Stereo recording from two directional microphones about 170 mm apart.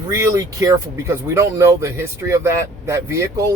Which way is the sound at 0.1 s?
20° right (ahead or behind).